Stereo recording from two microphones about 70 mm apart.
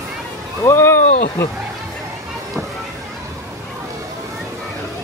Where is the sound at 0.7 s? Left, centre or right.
Left.